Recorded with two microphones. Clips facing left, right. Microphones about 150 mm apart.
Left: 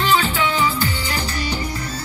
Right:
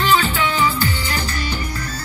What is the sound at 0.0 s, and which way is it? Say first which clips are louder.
Music: right 1 dB; 15° left (ahead or behind).